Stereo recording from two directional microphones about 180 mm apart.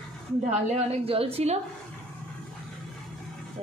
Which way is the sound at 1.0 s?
30° right (ahead or behind).